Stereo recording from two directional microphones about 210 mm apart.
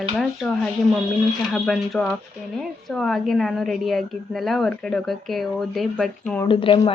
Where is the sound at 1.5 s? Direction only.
Centre (ahead or behind).